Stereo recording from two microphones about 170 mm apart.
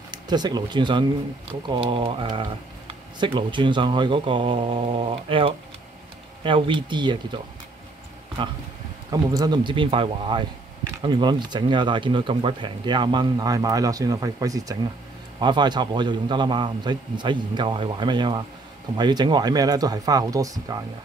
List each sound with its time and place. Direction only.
0.1 s speech: 25° right (ahead or behind)
9.1 s speech: 20° right (ahead or behind)